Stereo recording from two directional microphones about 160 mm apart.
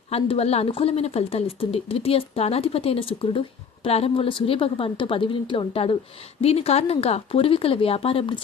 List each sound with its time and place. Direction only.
0.1 s a woman's voice: 40° left (ahead or behind)